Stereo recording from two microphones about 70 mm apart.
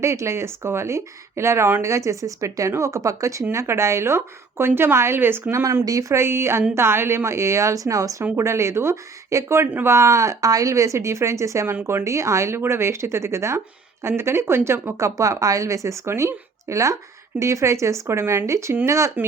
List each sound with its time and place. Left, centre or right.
0.0 s a woman's voice: right
5.8 s a woman's voice: right